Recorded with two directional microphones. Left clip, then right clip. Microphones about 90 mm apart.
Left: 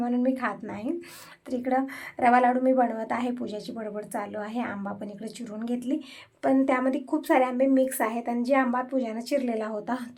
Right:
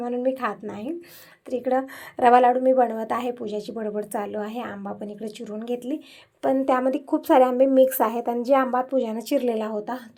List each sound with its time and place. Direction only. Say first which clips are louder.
0.2 s speech: right 3 dB; 25° right (ahead or behind)
1.7 s speech: even; 35° right (ahead or behind)
3.8 s speech: right 4 dB; 35° right (ahead or behind)
9.7 s speech: right 2 dB; 5° right (ahead or behind)